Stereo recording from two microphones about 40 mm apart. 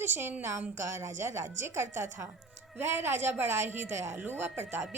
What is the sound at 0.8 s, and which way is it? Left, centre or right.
A woman's voice, right.